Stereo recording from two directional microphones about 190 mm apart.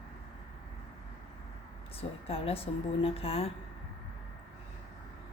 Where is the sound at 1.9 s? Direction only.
30° left (ahead or behind).